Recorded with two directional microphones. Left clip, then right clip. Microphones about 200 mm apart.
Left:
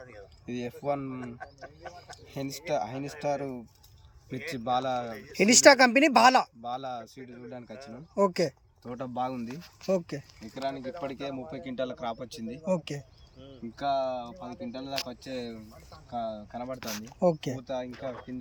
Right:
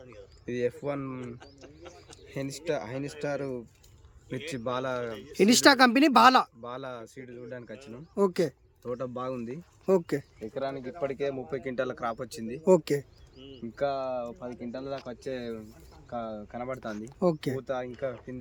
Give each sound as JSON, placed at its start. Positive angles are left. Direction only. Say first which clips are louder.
{"t": 0.1, "sound": "speech", "louder": "right 5 dB", "side_deg": -10}
{"t": 2.3, "sound": "speech", "louder": "left 1 dB", "side_deg": -10}
{"t": 4.4, "sound": "speech", "louder": "left 3 dB", "side_deg": -10}
{"t": 9.9, "sound": "speech", "louder": "right 4 dB", "side_deg": -20}